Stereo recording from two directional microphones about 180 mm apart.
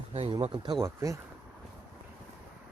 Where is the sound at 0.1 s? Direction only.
35° right (ahead or behind).